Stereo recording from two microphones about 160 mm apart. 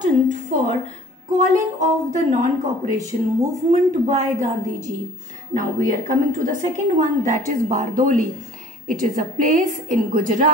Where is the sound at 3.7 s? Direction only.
45° right (ahead or behind).